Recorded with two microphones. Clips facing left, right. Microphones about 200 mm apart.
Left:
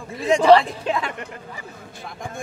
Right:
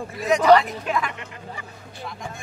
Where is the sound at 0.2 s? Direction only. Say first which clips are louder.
Left 2 dB; 30° left (ahead or behind).